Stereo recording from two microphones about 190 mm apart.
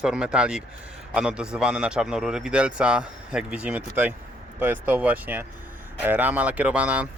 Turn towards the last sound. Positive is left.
turn(degrees=-5)  # may be behind; listen again after turning